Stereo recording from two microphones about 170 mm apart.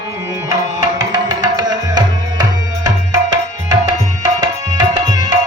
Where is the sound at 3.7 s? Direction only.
20° right (ahead or behind).